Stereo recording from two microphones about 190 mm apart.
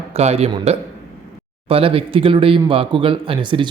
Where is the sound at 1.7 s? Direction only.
30° right (ahead or behind).